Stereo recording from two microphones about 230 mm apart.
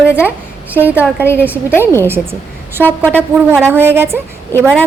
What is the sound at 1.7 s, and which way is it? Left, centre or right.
Speech, centre.